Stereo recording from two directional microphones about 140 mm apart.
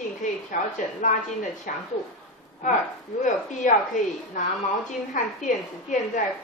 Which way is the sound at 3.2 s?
65° left (ahead or behind).